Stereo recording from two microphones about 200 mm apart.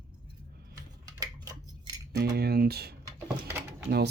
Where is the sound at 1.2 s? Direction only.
20° right (ahead or behind).